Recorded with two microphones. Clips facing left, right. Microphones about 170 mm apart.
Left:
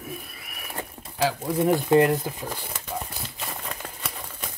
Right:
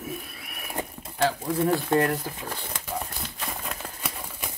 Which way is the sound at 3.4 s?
Centre (ahead or behind).